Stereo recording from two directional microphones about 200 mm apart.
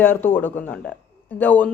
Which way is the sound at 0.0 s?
10° left (ahead or behind).